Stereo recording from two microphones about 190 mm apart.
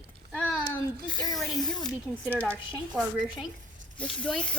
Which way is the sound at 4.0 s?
5° left (ahead or behind).